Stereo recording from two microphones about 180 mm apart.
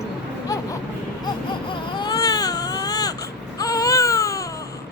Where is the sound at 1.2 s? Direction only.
25° left (ahead or behind).